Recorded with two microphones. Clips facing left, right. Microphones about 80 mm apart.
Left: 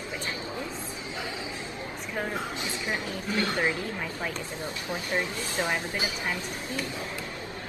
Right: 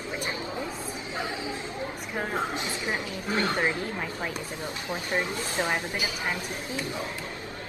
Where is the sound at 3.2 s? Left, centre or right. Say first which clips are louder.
Right 1 dB; right.